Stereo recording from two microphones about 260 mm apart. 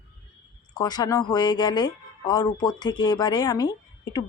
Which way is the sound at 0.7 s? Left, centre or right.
Centre.